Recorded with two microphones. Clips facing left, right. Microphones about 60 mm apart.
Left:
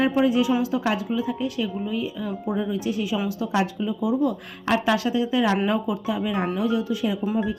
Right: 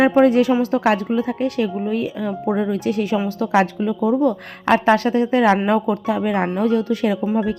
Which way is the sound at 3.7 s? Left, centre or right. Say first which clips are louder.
Right 5 dB; right.